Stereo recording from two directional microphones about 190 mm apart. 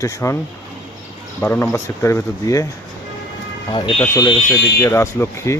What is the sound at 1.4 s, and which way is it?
Speech, 10° left (ahead or behind).